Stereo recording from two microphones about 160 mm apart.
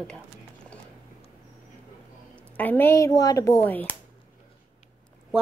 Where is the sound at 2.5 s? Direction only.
10° left (ahead or behind).